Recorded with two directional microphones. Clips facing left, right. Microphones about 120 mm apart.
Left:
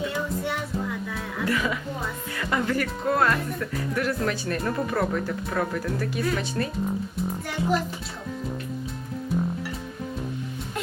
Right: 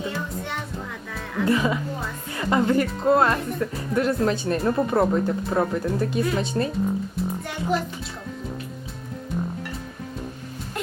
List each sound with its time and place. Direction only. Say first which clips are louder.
0.1 s music: left 2 dB; 5° left (ahead or behind)
1.5 s speech: right 5 dB; 25° right (ahead or behind)
7.7 s a child's voice: right 1 dB; centre (ahead or behind)